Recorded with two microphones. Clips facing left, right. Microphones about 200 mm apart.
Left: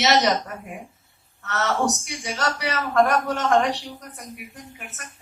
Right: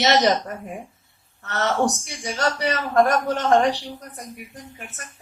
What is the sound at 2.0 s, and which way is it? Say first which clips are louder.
A man's voice: right 2 dB; 30° right (ahead or behind).